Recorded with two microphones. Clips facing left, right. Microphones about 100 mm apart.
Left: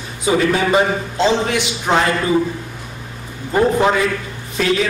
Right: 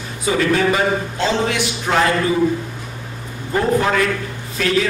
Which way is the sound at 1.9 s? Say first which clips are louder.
Left 1 dB; 20° left (ahead or behind).